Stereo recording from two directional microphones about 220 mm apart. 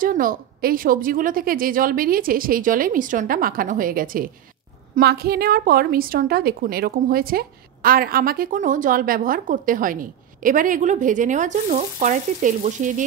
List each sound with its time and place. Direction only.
0.0 s a woman's voice: 40° right (ahead or behind)